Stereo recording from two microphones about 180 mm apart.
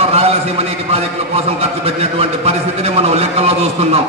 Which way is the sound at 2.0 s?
35° right (ahead or behind).